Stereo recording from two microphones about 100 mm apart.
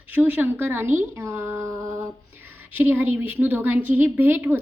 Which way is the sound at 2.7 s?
20° right (ahead or behind).